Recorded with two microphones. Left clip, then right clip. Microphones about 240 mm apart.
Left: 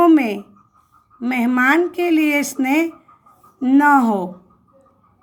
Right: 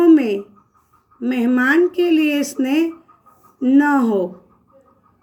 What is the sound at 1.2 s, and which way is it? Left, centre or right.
Speech, left.